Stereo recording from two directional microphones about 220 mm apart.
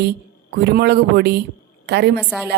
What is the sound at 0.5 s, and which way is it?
A woman's voice, 50° right (ahead or behind).